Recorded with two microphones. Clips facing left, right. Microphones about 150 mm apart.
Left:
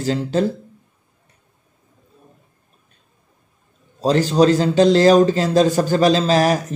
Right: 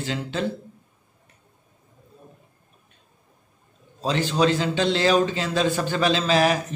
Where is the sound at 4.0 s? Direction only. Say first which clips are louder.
Left 7 dB; 40° left (ahead or behind).